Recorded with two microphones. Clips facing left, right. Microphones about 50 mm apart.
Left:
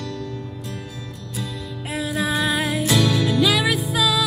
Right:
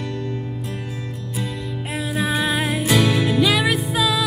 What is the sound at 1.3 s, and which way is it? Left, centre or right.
Music, centre.